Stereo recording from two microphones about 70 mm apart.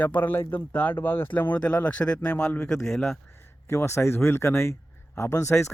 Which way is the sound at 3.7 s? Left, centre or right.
Left.